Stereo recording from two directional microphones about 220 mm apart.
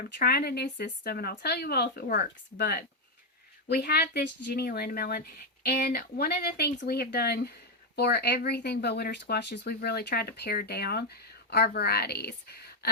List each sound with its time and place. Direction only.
0.0 s speech: 40° left (ahead or behind)